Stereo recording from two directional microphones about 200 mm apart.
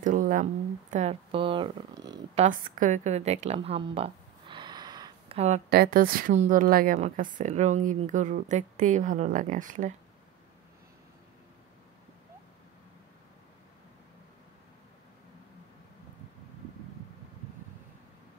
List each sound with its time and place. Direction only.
0.0 s a woman's voice: 40° right (ahead or behind); by 2.4 s 20° right (ahead or behind)
2.4 s a woman's voice: 40° right (ahead or behind); by 5.4 s 20° right (ahead or behind)
5.7 s a woman's voice: 50° right (ahead or behind)